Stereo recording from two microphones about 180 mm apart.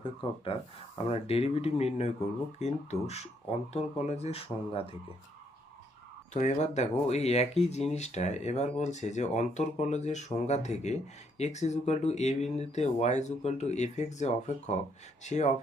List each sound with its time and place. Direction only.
0.0 s speech: 30° left (ahead or behind)
6.3 s speech: 40° left (ahead or behind)